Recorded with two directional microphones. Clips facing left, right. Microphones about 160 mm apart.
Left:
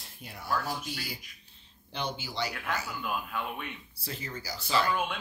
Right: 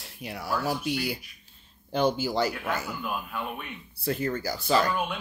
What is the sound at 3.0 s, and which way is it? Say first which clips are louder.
Speech: right 1 dB; 5° right (ahead or behind).